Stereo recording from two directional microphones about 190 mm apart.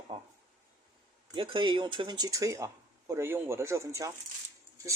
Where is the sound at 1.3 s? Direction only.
25° right (ahead or behind).